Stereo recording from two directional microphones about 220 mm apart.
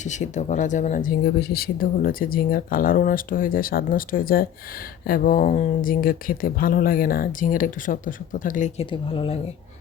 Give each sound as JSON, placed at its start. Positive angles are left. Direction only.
{"t": 0.0, "sound": "speech", "side_deg": 35}